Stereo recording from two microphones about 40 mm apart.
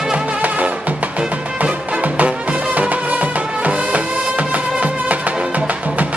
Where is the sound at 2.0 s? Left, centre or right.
Right.